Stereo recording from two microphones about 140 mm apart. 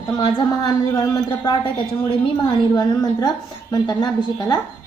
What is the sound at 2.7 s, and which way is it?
A woman's voice, 30° left (ahead or behind).